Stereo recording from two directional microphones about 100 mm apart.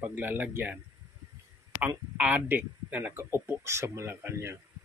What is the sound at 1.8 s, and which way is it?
Speech, 15° right (ahead or behind).